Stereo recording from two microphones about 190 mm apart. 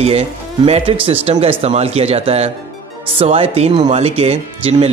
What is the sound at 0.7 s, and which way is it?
Speech, 30° right (ahead or behind).